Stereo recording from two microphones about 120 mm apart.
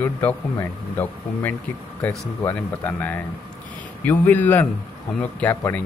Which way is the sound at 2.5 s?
15° left (ahead or behind).